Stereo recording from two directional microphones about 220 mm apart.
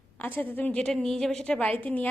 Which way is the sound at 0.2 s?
10° left (ahead or behind).